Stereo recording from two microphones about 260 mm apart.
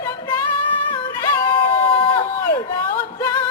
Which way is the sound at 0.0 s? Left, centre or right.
Centre.